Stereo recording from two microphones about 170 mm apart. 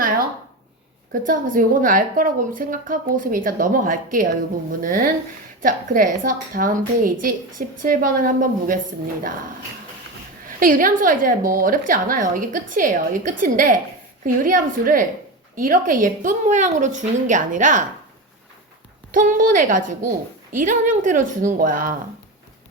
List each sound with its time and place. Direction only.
1.3 s a woman's voice: 55° right (ahead or behind)
10.6 s a woman's voice: 55° right (ahead or behind)
19.1 s a woman's voice: 50° right (ahead or behind)